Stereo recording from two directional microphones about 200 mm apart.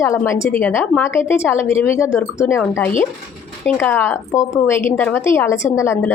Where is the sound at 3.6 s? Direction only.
10° left (ahead or behind).